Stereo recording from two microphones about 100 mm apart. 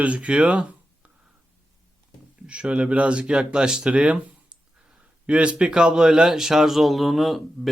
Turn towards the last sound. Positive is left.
turn(degrees=0)  # may be behind; listen again after turning